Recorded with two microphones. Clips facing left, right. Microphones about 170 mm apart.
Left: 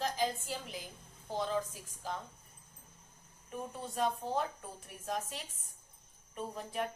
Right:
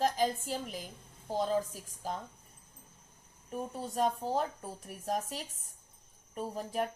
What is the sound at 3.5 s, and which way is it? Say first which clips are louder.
A woman's voice: right 4 dB; 40° right (ahead or behind).